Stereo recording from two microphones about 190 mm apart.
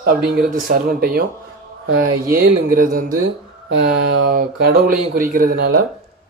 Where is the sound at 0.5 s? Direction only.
50° right (ahead or behind).